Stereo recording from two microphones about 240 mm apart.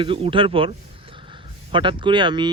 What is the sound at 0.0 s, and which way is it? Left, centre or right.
Speech, right.